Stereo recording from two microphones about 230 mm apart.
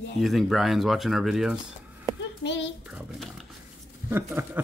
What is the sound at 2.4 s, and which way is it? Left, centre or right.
Speech, left.